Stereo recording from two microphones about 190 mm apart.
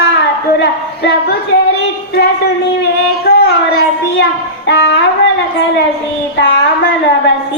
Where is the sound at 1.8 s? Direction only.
60° left (ahead or behind).